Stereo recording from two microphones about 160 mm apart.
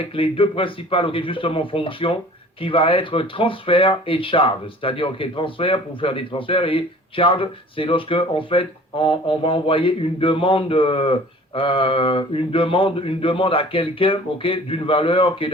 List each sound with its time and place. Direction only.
0.0 s speech: 35° left (ahead or behind)